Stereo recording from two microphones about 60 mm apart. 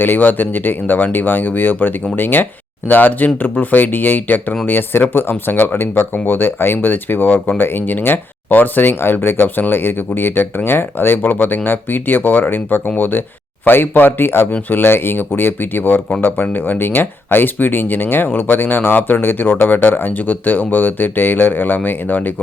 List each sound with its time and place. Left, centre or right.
0.0 s speech: left